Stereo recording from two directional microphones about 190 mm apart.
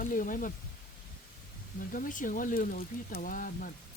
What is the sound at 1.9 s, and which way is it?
Speech, 45° left (ahead or behind).